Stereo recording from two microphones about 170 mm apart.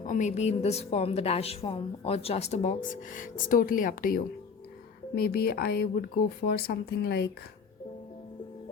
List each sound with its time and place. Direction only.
0.0 s a woman's voice: 45° left (ahead or behind); by 7.3 s 65° left (ahead or behind)